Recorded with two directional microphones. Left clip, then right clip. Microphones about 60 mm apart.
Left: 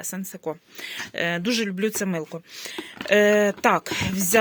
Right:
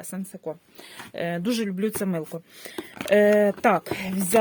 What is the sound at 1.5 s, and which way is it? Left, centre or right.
Speech, right.